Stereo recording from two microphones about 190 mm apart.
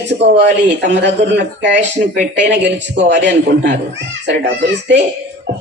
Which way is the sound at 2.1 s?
70° right (ahead or behind).